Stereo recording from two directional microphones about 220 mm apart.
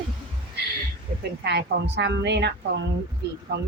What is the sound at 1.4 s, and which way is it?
A woman's voice, 50° right (ahead or behind).